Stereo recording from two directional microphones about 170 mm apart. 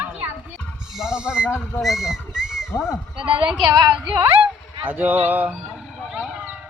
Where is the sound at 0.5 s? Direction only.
5° left (ahead or behind).